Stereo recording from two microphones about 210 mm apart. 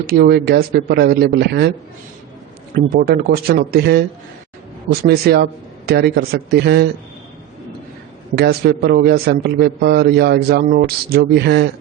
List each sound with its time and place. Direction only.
0.1 s a man's voice: 50° right (ahead or behind)
2.7 s a man's voice: 45° right (ahead or behind)
8.4 s a man's voice: 50° right (ahead or behind)